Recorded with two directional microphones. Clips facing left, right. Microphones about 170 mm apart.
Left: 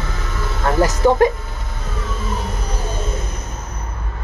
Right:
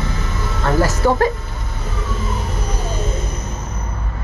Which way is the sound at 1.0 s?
15° left (ahead or behind).